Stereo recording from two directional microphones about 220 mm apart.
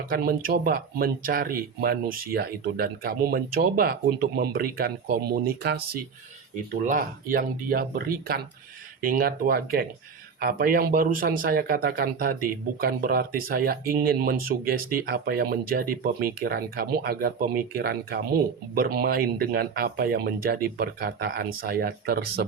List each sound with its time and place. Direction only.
0.0 s speech: 40° right (ahead or behind)